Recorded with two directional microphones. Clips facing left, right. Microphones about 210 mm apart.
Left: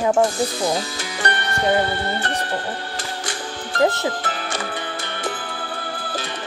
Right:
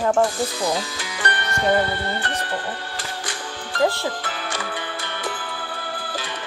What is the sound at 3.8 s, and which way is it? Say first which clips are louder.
Speech: left 2 dB; 20° left (ahead or behind).